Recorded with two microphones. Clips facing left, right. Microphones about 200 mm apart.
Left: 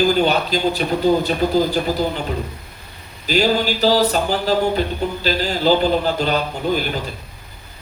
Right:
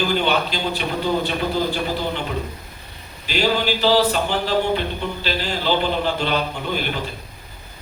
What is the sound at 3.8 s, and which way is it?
Music, 40° left (ahead or behind).